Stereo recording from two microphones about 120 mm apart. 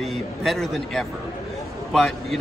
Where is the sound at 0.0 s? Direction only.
Centre (ahead or behind).